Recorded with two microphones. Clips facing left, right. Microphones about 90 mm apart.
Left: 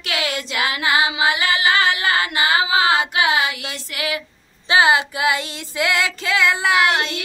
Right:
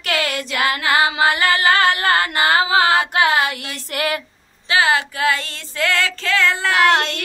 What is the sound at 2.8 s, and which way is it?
Singing, 20° left (ahead or behind).